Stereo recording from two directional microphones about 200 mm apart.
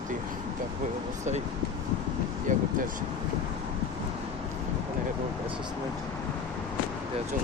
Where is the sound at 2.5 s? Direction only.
40° right (ahead or behind).